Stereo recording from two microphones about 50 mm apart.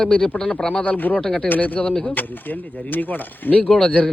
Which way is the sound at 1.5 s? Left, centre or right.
Left.